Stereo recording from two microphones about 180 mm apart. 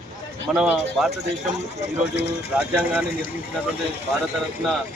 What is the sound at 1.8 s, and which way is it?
Speech, 70° left (ahead or behind).